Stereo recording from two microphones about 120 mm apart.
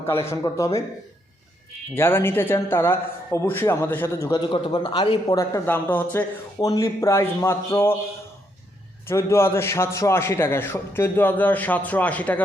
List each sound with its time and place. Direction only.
0.0 s a man's voice: 20° left (ahead or behind)
2.0 s a man's voice: 20° left (ahead or behind)
4.5 s a man's voice: 40° left (ahead or behind)
5.6 s speech: 15° left (ahead or behind)
6.6 s a man's voice: 30° left (ahead or behind)
9.0 s a man's voice: 20° left (ahead or behind)